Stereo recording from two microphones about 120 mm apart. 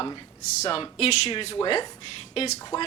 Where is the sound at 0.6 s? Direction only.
55° left (ahead or behind).